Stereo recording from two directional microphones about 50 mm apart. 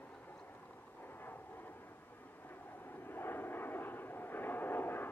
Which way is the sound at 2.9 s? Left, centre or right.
Left.